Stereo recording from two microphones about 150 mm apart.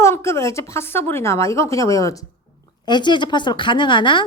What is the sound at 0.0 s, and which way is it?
A woman's voice, 20° left (ahead or behind).